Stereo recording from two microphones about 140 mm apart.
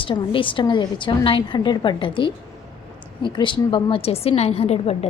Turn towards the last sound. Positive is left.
turn(degrees=45)  # may be behind; listen again after turning